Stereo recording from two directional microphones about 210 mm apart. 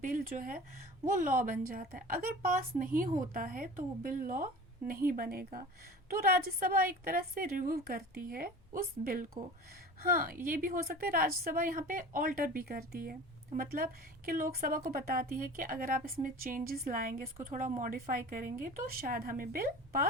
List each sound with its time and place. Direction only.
0.0 s a woman's voice: 40° right (ahead or behind)